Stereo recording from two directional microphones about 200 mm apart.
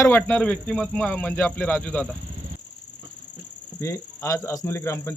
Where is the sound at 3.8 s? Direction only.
15° left (ahead or behind).